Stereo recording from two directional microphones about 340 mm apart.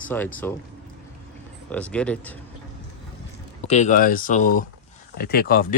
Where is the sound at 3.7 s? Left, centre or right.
Left.